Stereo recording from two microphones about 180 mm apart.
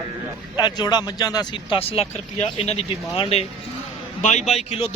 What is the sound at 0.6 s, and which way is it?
Speech, 25° left (ahead or behind).